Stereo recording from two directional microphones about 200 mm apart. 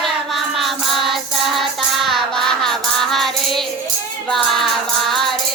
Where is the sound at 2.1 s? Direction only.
Centre (ahead or behind).